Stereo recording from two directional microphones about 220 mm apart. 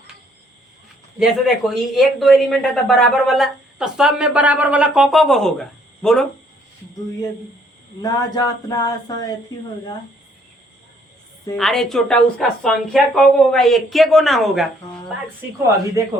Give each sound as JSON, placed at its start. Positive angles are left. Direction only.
{"t": 1.2, "sound": "a man's voice", "side_deg": 0}
{"t": 8.0, "sound": "a sound", "side_deg": 15}
{"t": 11.5, "sound": "a man's voice", "side_deg": 0}